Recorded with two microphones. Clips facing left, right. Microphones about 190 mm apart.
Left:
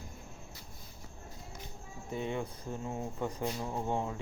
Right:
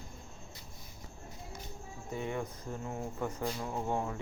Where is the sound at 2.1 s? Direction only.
20° left (ahead or behind).